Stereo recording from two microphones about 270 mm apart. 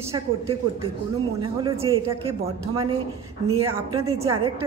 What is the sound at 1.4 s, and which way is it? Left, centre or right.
Speech, centre.